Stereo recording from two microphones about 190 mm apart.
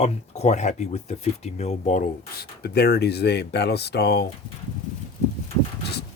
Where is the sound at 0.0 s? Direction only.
35° left (ahead or behind); by 4.3 s 60° left (ahead or behind).